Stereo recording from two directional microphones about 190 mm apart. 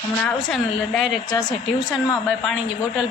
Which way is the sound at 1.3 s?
20° left (ahead or behind).